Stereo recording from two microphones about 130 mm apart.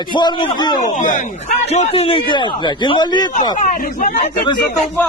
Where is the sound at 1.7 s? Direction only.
55° left (ahead or behind); by 3.3 s 35° left (ahead or behind).